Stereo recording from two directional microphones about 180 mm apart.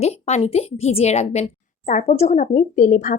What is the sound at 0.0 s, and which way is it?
A woman's voice, 40° left (ahead or behind).